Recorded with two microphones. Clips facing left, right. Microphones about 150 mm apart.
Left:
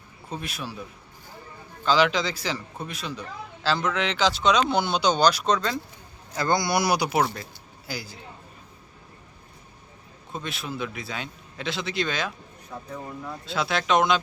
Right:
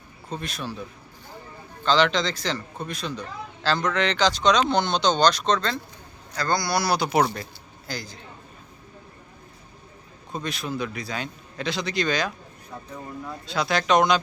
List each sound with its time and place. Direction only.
0.3 s speech: 5° left (ahead or behind)
1.8 s a man's voice: 5° left (ahead or behind)
10.3 s a man's voice: centre (ahead or behind)
13.4 s a man's voice: centre (ahead or behind)